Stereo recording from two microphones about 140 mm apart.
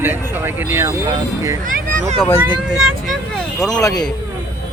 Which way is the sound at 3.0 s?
Centre (ahead or behind).